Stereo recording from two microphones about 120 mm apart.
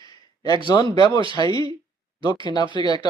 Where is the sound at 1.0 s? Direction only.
35° left (ahead or behind).